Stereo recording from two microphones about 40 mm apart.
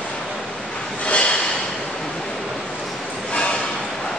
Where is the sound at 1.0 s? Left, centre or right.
Left.